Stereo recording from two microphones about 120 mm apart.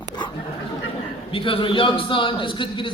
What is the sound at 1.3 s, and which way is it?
A man's voice, 45° left (ahead or behind).